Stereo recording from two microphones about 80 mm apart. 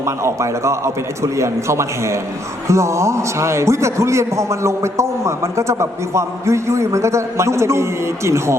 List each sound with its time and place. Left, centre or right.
0.0 s a man's voice: right